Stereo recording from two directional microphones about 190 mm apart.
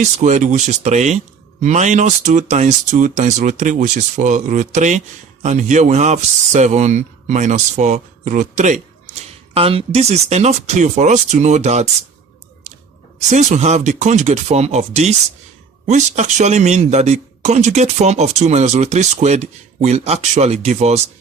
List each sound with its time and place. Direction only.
0.2 s speech: 40° right (ahead or behind)
13.1 s speech: 40° right (ahead or behind)